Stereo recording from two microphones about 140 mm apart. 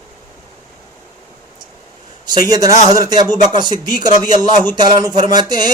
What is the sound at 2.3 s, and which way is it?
Speech, 25° right (ahead or behind).